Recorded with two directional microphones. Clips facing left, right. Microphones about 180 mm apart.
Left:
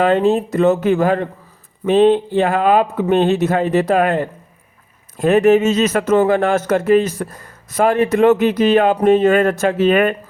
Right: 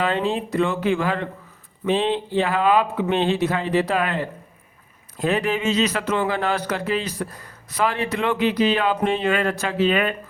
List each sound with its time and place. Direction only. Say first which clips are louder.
0.0 s speech: left 8 dB; 45° left (ahead or behind)